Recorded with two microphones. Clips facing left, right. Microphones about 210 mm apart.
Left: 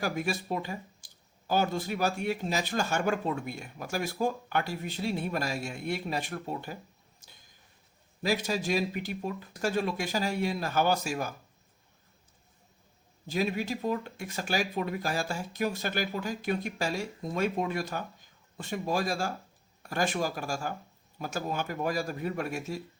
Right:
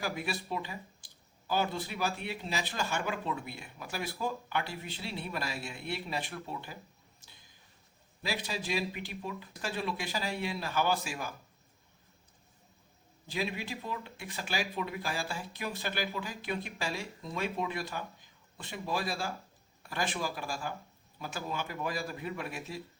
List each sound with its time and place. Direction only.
0.0 s speech: 45° left (ahead or behind)
8.2 s speech: 45° left (ahead or behind)
13.2 s speech: 45° left (ahead or behind)